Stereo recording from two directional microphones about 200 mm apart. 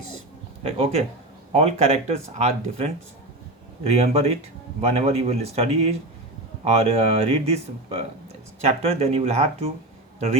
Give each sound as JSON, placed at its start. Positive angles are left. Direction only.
{"t": 0.6, "sound": "speech", "side_deg": -30}